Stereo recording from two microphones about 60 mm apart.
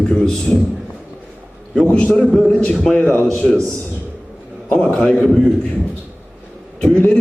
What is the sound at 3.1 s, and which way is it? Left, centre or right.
Speech, left.